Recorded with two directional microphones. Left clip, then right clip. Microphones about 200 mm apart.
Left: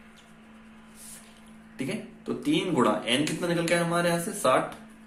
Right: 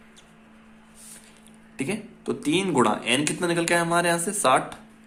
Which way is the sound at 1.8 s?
45° right (ahead or behind).